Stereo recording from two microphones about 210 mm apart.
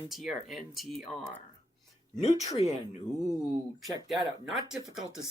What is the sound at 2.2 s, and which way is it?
Speech, 15° left (ahead or behind).